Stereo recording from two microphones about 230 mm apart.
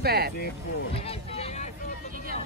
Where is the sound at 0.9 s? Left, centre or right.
Left.